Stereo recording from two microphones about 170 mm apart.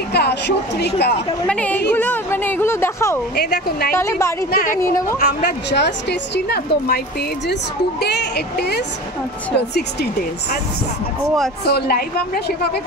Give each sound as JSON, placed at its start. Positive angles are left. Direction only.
{"t": 0.1, "sound": "speech", "side_deg": 80}
{"t": 1.5, "sound": "a sound", "side_deg": 10}
{"t": 3.3, "sound": "a woman's voice", "side_deg": 70}
{"t": 3.9, "sound": "a woman's voice", "side_deg": 15}
{"t": 4.5, "sound": "speech", "side_deg": 60}
{"t": 5.2, "sound": "a woman's voice", "side_deg": 75}
{"t": 11.6, "sound": "a woman's voice", "side_deg": 70}